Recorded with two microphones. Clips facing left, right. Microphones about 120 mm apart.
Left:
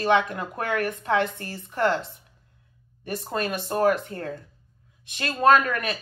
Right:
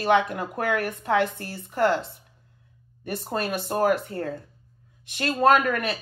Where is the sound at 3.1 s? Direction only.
30° right (ahead or behind).